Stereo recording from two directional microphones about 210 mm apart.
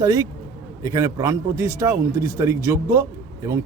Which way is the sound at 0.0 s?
15° right (ahead or behind).